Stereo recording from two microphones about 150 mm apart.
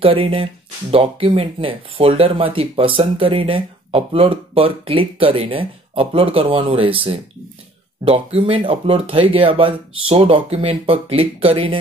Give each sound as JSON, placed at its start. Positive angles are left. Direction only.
{"t": 0.0, "sound": "speech", "side_deg": -35}